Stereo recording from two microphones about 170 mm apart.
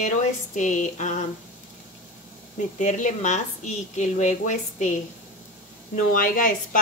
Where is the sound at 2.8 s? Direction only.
45° left (ahead or behind).